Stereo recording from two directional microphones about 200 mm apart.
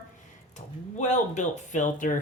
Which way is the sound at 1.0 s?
40° left (ahead or behind).